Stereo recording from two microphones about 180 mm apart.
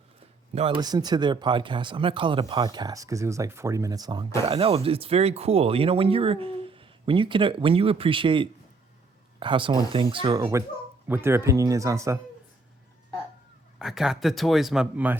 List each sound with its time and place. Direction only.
0.5 s speech: 30° right (ahead or behind)
13.7 s speech: centre (ahead or behind)